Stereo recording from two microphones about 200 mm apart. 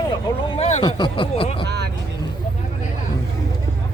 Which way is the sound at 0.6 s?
30° left (ahead or behind).